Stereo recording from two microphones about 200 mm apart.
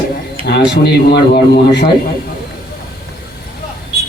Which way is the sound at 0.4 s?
60° left (ahead or behind).